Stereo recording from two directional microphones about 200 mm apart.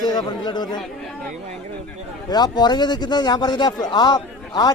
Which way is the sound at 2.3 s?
20° left (ahead or behind).